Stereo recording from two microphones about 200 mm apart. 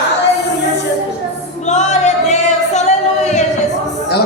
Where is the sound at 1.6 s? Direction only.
35° left (ahead or behind).